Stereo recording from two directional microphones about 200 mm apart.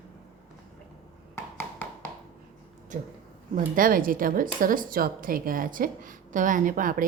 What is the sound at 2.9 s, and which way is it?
A woman's voice, 40° right (ahead or behind).